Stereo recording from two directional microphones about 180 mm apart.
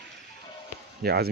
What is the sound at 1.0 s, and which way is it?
Speech, 60° right (ahead or behind).